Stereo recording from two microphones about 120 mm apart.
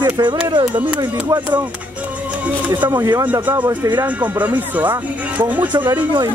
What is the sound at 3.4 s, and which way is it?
Speech, 15° right (ahead or behind).